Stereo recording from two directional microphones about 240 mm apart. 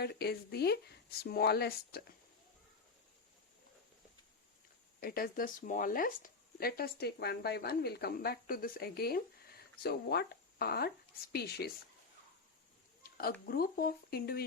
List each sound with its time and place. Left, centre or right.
0.0 s speech: left
4.9 s speech: left
13.0 s a sound: left
13.4 s speech: left